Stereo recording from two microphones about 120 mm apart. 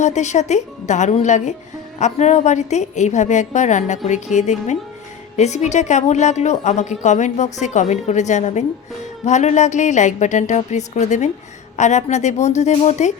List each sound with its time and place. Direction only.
0.0 s a woman's voice: 75° left (ahead or behind)